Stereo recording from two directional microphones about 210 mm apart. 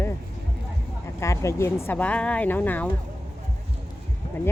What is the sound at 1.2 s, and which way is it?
Speech, 15° left (ahead or behind).